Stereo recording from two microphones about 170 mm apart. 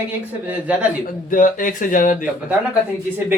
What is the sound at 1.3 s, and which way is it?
Speech, 50° left (ahead or behind).